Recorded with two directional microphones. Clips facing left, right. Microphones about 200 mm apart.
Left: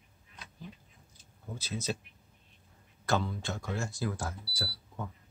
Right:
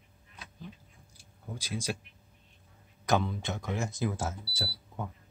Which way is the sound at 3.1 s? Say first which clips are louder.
Right 2 dB; 20° right (ahead or behind).